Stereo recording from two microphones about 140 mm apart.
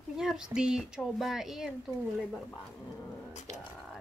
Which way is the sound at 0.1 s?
5° right (ahead or behind).